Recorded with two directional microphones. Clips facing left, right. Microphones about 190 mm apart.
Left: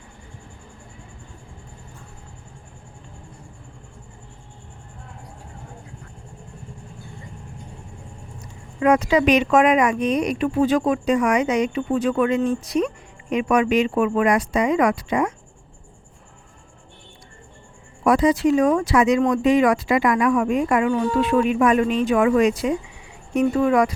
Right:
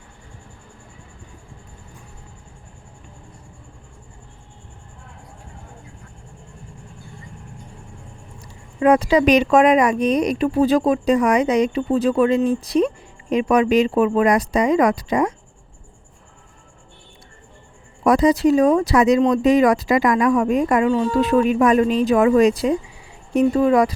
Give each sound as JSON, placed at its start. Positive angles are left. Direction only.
{"t": 8.4, "sound": "speech", "side_deg": -30}
{"t": 18.0, "sound": "speech", "side_deg": -40}